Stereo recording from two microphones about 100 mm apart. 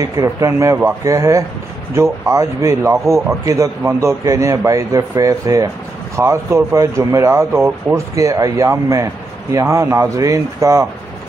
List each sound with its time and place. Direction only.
0.0 s speech: 30° right (ahead or behind)